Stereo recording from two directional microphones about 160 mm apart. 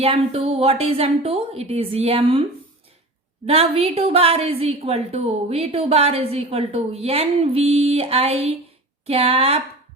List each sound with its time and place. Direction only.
0.0 s a woman's voice: 35° right (ahead or behind)
3.4 s a woman's voice: 40° right (ahead or behind)